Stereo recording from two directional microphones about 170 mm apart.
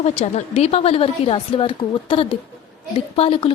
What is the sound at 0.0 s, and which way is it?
A woman's voice, 40° left (ahead or behind).